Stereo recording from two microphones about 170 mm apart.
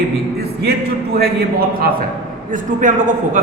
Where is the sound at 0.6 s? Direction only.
70° right (ahead or behind).